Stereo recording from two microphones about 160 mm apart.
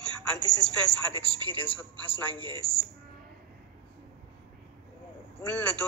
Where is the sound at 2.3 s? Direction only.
30° right (ahead or behind).